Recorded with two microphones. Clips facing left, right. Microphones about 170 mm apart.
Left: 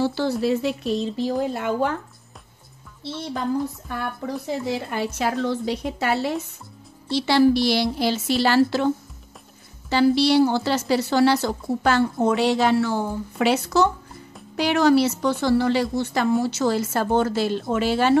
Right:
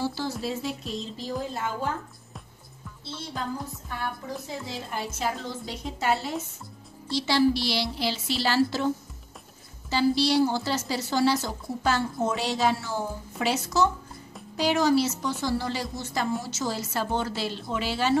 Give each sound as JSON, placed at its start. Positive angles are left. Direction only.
{"t": 0.0, "sound": "a woman's voice", "side_deg": 65}
{"t": 4.0, "sound": "a woman's voice", "side_deg": 65}